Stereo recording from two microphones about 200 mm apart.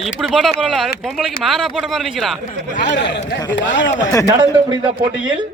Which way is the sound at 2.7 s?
60° left (ahead or behind).